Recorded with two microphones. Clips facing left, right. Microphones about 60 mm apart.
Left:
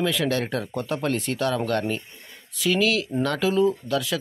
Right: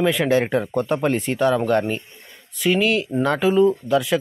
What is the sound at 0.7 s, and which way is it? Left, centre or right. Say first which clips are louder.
Speech: right 4 dB; centre.